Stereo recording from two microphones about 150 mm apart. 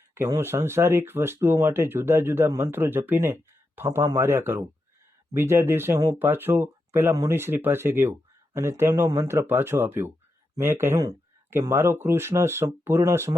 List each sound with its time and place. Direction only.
0.1 s speech: 15° right (ahead or behind)